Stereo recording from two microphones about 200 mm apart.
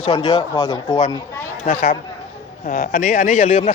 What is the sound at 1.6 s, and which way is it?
A man's voice, 40° left (ahead or behind).